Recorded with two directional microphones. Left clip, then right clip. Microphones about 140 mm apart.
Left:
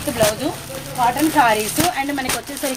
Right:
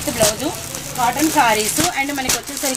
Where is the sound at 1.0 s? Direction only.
10° left (ahead or behind).